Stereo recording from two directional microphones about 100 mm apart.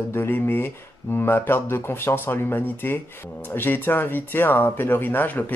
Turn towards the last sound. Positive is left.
turn(degrees=20)  # may be behind; listen again after turning